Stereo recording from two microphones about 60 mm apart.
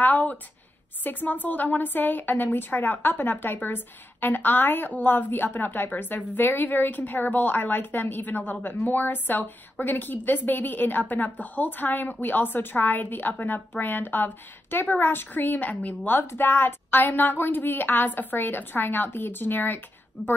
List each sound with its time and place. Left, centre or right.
0.0 s a woman's voice: left